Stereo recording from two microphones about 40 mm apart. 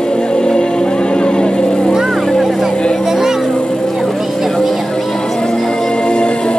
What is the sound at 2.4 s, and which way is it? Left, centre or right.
Music, centre.